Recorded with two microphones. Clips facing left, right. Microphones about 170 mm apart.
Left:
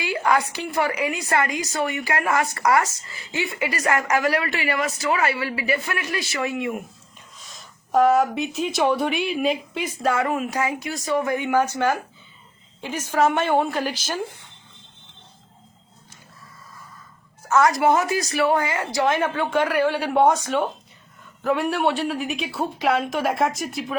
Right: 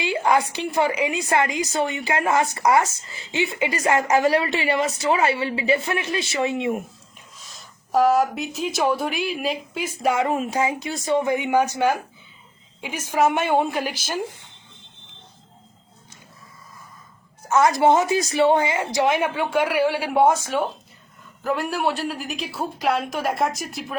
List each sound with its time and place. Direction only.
0.0 s a woman's voice: 25° right (ahead or behind)
7.3 s speech: centre (ahead or behind)
10.0 s a woman's voice: 15° right (ahead or behind)
17.5 s a woman's voice: 25° right (ahead or behind); by 24.0 s centre (ahead or behind)